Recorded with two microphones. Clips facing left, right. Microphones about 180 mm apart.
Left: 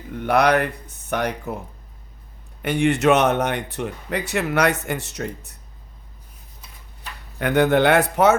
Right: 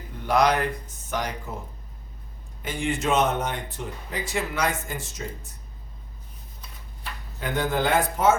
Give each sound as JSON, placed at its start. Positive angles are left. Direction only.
{"t": 0.2, "sound": "speech", "side_deg": 65}
{"t": 2.6, "sound": "speech", "side_deg": 70}
{"t": 7.3, "sound": "speech", "side_deg": 70}